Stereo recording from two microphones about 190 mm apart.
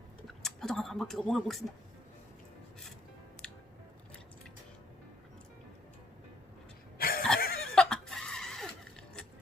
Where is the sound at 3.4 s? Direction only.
5° left (ahead or behind).